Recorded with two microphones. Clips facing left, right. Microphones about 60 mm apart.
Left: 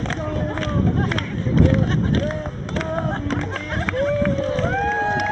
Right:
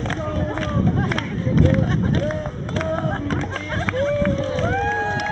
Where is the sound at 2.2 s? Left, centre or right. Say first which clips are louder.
Right 1 dB; centre.